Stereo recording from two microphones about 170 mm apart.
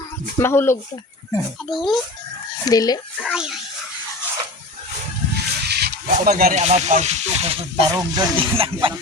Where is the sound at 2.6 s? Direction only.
20° left (ahead or behind).